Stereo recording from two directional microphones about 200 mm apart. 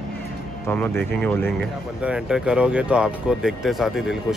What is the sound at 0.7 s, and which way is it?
Speech, 10° left (ahead or behind).